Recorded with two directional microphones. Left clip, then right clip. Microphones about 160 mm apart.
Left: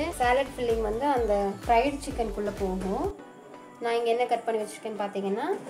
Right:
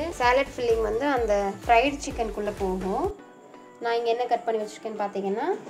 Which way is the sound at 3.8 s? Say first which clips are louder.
Right 1 dB; 15° right (ahead or behind).